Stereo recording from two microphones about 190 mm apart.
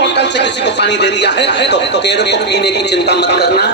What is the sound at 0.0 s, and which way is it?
A man's voice, 65° left (ahead or behind).